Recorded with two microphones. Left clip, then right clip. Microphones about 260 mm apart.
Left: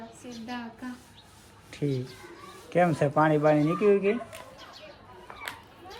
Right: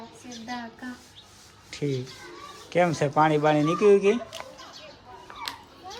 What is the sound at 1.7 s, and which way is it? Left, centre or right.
Speech, centre.